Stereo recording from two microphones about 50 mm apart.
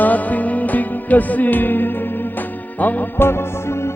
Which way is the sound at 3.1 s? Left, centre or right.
Left.